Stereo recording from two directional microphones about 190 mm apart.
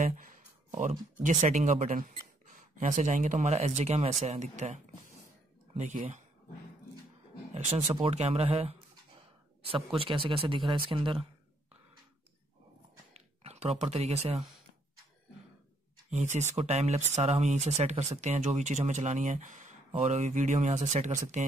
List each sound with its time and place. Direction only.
0.0 s speech: 45° right (ahead or behind)
7.5 s speech: 35° right (ahead or behind)
9.9 s speech: 30° right (ahead or behind)
13.1 s a sound: 30° right (ahead or behind)
16.1 s speech: 40° right (ahead or behind)